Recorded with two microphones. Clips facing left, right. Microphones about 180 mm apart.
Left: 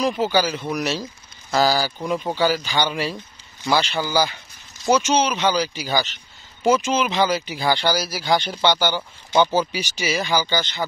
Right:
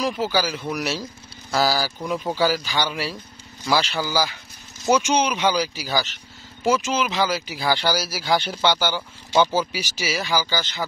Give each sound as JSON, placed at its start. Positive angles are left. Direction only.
{"t": 0.0, "sound": "speech", "side_deg": -5}
{"t": 2.0, "sound": "speech", "side_deg": 5}
{"t": 2.3, "sound": "speech", "side_deg": -5}